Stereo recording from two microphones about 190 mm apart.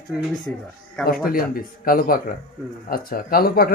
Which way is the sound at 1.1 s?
50° left (ahead or behind).